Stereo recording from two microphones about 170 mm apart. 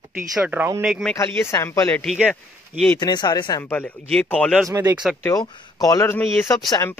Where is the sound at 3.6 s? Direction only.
10° left (ahead or behind).